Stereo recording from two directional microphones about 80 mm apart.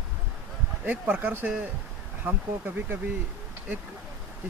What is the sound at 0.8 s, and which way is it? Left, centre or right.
Speech, centre.